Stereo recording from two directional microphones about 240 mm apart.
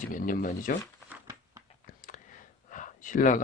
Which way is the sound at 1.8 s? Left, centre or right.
Left.